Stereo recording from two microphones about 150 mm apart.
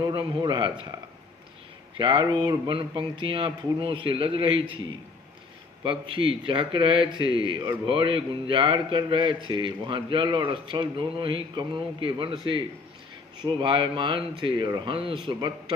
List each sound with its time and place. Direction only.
0.0 s speech: 30° right (ahead or behind)
2.0 s speech: 35° right (ahead or behind)